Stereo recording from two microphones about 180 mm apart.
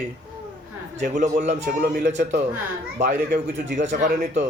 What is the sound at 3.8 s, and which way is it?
Speech, 45° right (ahead or behind).